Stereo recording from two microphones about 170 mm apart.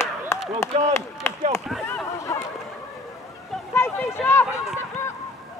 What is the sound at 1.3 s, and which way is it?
Chop, 15° left (ahead or behind).